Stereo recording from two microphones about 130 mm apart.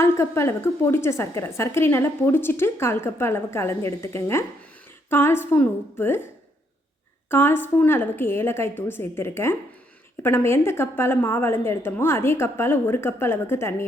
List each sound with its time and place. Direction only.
0.0 s a woman's voice: 20° left (ahead or behind)
7.3 s a woman's voice: 15° left (ahead or behind)